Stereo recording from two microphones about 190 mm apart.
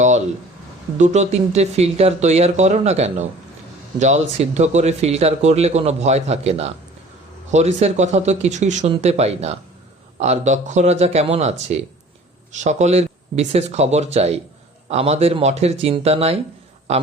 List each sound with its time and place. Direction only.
0.9 s speech: 40° right (ahead or behind)